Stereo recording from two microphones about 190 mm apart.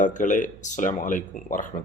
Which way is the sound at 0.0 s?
40° left (ahead or behind).